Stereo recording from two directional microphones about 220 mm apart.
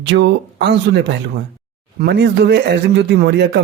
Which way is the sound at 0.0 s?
55° right (ahead or behind).